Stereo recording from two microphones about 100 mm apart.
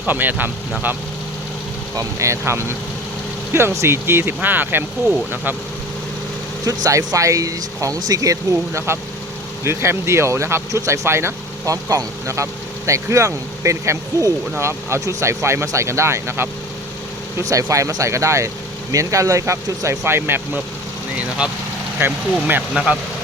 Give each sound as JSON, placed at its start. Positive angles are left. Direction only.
{"t": 0.0, "sound": "speech", "side_deg": -20}
{"t": 2.0, "sound": "speech", "side_deg": -30}
{"t": 6.7, "sound": "speech", "side_deg": -35}
{"t": 21.2, "sound": "speech", "side_deg": -10}